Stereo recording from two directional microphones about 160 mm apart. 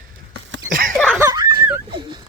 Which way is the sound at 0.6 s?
60° right (ahead or behind).